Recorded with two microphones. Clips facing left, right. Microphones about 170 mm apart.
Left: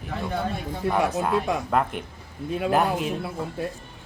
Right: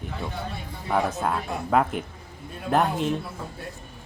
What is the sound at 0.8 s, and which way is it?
Speech, 65° left (ahead or behind).